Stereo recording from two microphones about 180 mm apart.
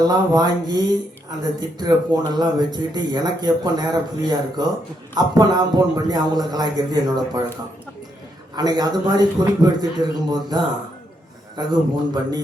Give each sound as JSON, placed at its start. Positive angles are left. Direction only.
{"t": 0.0, "sound": "a man's voice", "side_deg": -20}
{"t": 8.5, "sound": "a man's voice", "side_deg": -20}